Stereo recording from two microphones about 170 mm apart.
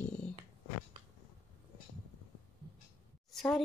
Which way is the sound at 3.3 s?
Centre (ahead or behind).